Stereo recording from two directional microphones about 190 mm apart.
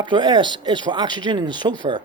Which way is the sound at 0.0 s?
25° right (ahead or behind).